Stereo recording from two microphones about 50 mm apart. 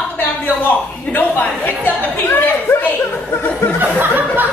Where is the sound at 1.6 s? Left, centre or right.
Left.